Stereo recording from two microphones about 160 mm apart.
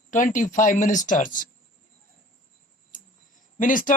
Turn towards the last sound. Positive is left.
turn(degrees=55)  # may be behind; listen again after turning